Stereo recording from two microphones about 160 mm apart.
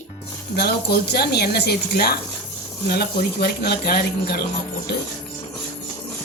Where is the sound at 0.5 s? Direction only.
80° left.